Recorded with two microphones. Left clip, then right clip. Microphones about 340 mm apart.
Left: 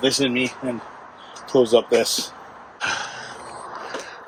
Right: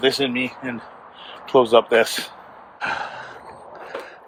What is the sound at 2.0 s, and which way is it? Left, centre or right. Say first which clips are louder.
Speech: left 2 dB; centre.